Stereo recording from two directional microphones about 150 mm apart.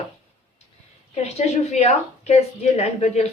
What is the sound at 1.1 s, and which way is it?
A woman's voice, 45° left (ahead or behind).